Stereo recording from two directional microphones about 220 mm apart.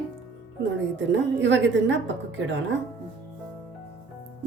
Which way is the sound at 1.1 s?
55° right (ahead or behind).